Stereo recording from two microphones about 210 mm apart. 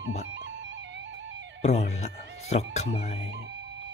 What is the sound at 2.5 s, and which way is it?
Speech, 30° left (ahead or behind).